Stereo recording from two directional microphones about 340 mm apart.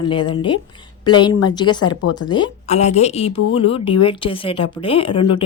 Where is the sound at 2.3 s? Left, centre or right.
Centre.